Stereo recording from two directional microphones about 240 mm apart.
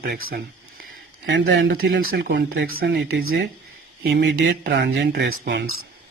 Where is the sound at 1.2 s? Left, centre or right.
Right.